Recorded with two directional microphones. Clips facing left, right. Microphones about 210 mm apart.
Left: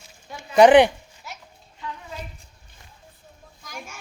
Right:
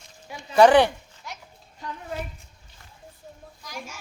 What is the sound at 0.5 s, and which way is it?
Speech, 15° left (ahead or behind).